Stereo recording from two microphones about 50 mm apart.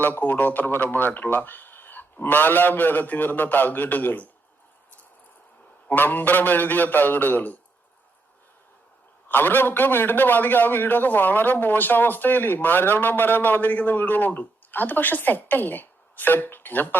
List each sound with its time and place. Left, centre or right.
0.0 s a man's voice: left
5.9 s a man's voice: left
9.3 s a man's voice: left